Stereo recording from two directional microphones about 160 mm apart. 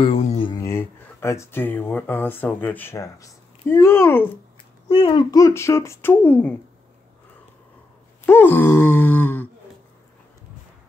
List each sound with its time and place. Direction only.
0.0 s mantra: 35° left (ahead or behind)
0.6 s speech: 15° left (ahead or behind)
4.8 s speech: 30° left (ahead or behind); by 6.5 s 10° left (ahead or behind)
8.3 s speech: 15° left (ahead or behind)